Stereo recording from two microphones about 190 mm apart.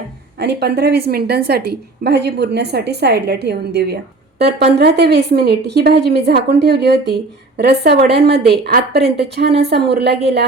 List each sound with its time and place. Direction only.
0.4 s a woman's voice: 60° right (ahead or behind)